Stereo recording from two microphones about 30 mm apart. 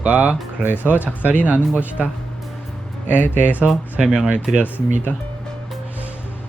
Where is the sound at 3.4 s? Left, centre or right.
Right.